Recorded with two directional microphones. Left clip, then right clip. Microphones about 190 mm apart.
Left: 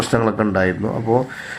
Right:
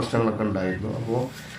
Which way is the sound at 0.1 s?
35° left (ahead or behind).